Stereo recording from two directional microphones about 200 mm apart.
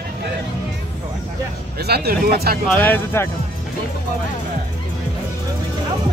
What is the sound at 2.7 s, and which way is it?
Speech, 10° left (ahead or behind).